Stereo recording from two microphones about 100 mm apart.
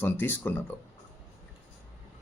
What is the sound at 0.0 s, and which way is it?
Speech, 20° left (ahead or behind).